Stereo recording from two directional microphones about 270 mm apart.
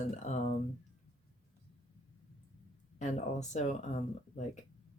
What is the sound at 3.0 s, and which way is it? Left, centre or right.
Speech, left.